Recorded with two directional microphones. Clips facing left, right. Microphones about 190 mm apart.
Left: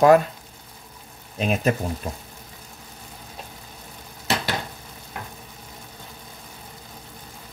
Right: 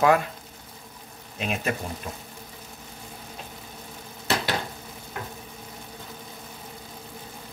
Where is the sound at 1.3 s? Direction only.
40° left (ahead or behind).